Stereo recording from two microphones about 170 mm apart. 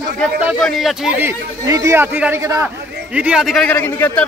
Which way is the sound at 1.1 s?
15° right (ahead or behind).